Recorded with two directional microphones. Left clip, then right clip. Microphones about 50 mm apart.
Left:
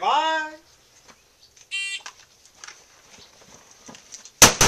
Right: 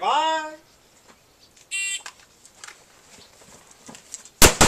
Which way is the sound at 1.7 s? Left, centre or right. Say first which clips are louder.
Right 1 dB; centre.